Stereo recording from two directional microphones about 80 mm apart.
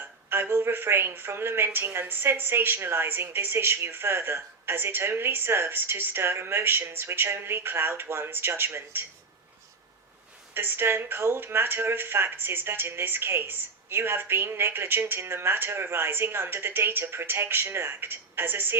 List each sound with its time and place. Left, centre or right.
0.3 s a woman's voice: right
10.5 s a woman's voice: right